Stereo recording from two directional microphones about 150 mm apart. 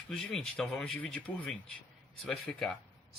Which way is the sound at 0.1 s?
5° left (ahead or behind).